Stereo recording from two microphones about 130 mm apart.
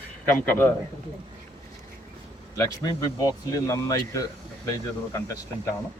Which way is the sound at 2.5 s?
30° left (ahead or behind).